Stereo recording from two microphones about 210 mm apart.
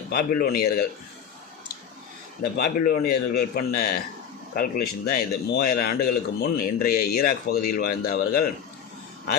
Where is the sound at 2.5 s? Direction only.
45° left (ahead or behind).